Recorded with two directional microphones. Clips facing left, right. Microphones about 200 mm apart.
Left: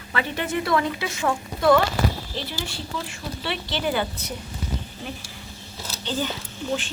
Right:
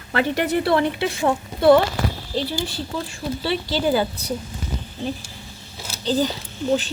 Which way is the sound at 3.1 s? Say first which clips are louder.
Right 6 dB; 30° right (ahead or behind).